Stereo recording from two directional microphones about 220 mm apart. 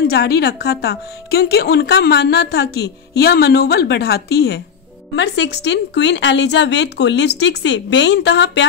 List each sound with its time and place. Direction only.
0.0 s speech: 45° left (ahead or behind)